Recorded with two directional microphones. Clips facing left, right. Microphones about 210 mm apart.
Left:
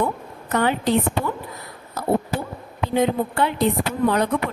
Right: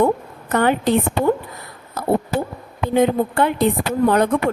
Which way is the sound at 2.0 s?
50° right (ahead or behind).